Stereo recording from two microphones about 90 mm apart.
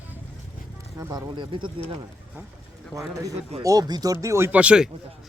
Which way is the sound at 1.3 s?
65° right (ahead or behind).